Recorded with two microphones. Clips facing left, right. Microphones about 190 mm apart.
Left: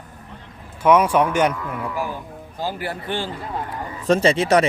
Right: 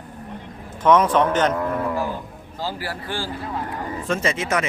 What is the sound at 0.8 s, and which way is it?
Speech, 10° left (ahead or behind).